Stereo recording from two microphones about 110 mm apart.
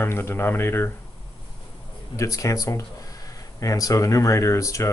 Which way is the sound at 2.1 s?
30° left (ahead or behind).